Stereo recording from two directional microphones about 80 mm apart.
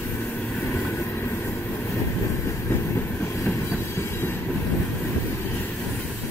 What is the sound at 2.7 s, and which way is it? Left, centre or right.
Train, left.